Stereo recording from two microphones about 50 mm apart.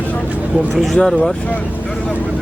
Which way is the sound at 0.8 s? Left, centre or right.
Centre.